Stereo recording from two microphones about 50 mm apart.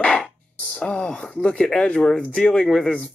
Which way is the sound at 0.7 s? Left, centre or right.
Centre.